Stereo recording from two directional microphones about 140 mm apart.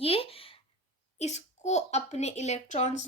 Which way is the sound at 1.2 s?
55° left (ahead or behind).